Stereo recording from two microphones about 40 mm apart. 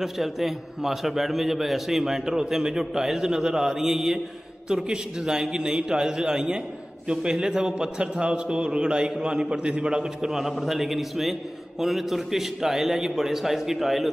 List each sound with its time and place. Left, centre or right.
0.0 s a man's voice: centre
4.6 s a man's voice: right; by 14.1 s centre